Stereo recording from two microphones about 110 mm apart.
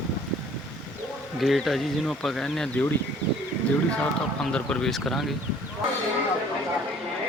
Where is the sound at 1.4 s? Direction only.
Centre (ahead or behind).